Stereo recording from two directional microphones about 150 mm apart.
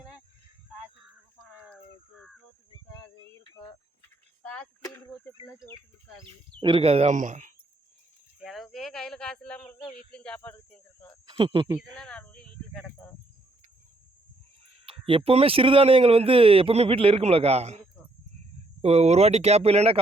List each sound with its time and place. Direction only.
1.7 s a sound: centre (ahead or behind)
4.4 s speech: 10° left (ahead or behind)
6.6 s speech: 35° right (ahead or behind); by 7.5 s 60° right (ahead or behind)
8.4 s speech: centre (ahead or behind)
9.6 s speech: 35° left (ahead or behind)
10.1 s speech: 5° left (ahead or behind)
11.3 s speech: 35° right (ahead or behind)
11.9 s a sound: 5° left (ahead or behind)
14.8 s speech: 40° right (ahead or behind)